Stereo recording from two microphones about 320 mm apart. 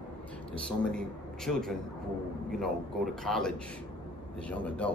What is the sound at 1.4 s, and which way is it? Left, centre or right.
Speech, centre.